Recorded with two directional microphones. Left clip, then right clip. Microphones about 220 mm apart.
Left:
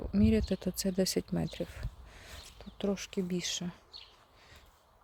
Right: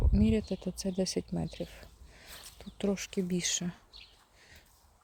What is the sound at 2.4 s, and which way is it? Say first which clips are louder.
Speech: right 1 dB; 10° right (ahead or behind).